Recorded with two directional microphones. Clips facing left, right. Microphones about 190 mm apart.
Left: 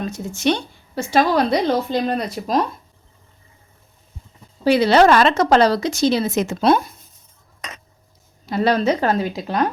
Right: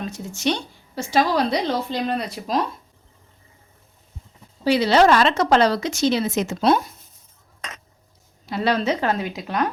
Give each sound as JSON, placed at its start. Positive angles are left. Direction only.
{"t": 0.1, "sound": "a woman's voice", "side_deg": 55}
{"t": 4.6, "sound": "a woman's voice", "side_deg": 50}
{"t": 8.4, "sound": "a woman's voice", "side_deg": 45}